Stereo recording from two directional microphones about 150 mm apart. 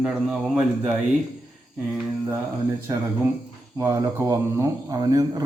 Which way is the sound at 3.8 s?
20° right (ahead or behind).